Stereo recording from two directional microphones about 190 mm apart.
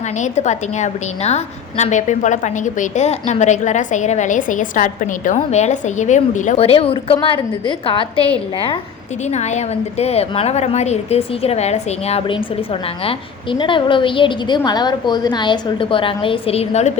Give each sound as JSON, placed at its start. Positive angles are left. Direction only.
{"t": 0.2, "sound": "a woman's voice", "side_deg": 40}
{"t": 9.3, "sound": "a woman's voice", "side_deg": 35}